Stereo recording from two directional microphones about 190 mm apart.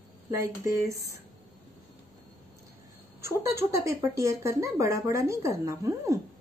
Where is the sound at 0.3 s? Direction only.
15° right (ahead or behind).